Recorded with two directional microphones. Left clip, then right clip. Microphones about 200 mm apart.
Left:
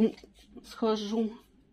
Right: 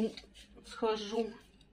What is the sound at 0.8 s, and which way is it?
Speech, 35° left (ahead or behind).